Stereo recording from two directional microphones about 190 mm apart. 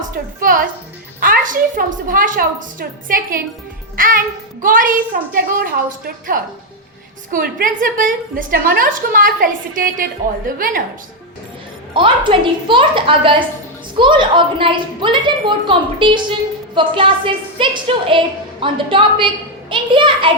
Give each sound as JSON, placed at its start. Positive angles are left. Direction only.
{"t": 0.4, "sound": "a woman's voice", "side_deg": -45}
{"t": 3.9, "sound": "music", "side_deg": -50}
{"t": 4.6, "sound": "a woman's voice", "side_deg": -45}
{"t": 11.9, "sound": "a woman's voice", "side_deg": -25}